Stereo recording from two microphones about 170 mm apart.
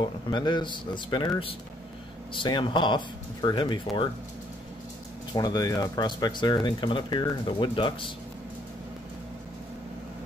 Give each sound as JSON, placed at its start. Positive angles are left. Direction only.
{"t": 0.0, "sound": "speech", "side_deg": 25}
{"t": 5.3, "sound": "speech", "side_deg": 20}